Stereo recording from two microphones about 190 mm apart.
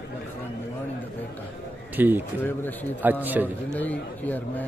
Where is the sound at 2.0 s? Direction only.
10° right (ahead or behind).